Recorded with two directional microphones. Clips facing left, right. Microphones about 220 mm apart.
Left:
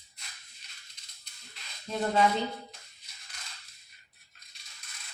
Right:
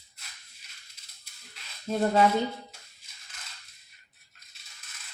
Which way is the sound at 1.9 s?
45° right (ahead or behind).